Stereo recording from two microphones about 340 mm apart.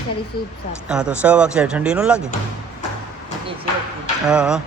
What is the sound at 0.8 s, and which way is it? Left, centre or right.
Speech, centre.